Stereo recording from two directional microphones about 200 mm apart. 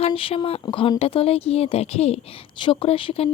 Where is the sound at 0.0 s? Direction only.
25° left (ahead or behind).